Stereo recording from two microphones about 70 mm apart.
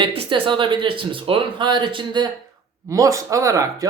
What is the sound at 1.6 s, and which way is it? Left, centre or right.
Speech, right.